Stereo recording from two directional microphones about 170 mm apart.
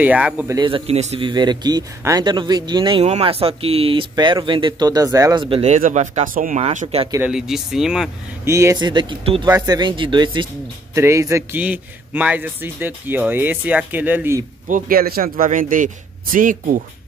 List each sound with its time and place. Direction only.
0.0 s a man's voice: 10° right (ahead or behind)
0.6 s a man's voice: 30° right (ahead or behind)
1.3 s speech: 25° right (ahead or behind)
5.6 s speech: 45° right (ahead or behind)
6.6 s a man's voice: 40° right (ahead or behind)
7.2 s speech: 5° right (ahead or behind)
8.5 s a man's voice: 15° right (ahead or behind)
14.7 s speech: 60° right (ahead or behind)